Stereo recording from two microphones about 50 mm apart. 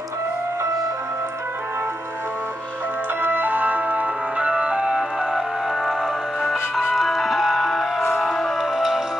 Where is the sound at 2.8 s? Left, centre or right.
Right.